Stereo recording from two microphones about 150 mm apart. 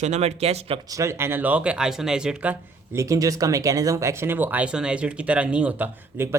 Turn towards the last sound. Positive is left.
turn(degrees=-10)  # may be behind; listen again after turning